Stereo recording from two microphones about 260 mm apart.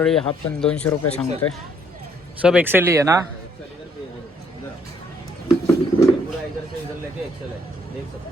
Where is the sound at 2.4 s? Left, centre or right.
Centre.